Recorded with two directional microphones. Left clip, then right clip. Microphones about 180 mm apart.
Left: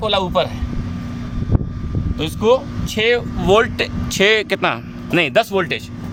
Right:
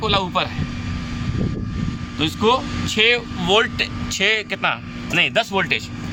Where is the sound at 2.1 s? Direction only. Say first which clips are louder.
Left 2 dB; 60° left (ahead or behind).